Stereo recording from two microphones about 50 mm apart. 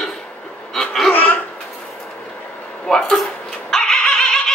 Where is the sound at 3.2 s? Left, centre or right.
Centre.